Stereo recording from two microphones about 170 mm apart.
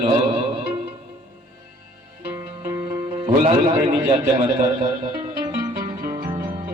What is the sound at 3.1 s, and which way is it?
A man's voice, 30° right (ahead or behind).